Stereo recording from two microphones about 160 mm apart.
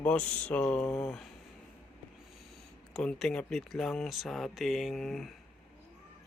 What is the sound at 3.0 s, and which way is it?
Speech, centre (ahead or behind).